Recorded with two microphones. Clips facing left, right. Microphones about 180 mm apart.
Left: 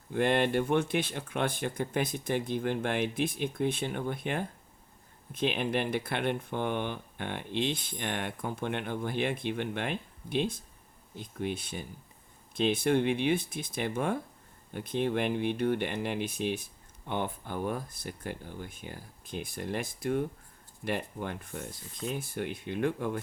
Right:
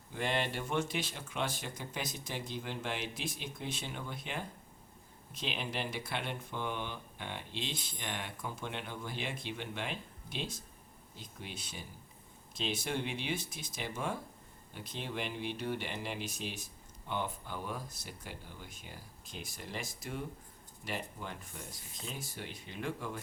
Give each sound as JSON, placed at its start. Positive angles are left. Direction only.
{"t": 0.1, "sound": "speech", "side_deg": 55}